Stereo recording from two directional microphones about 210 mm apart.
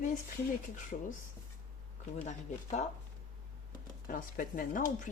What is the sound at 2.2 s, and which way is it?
Speech, 35° left (ahead or behind).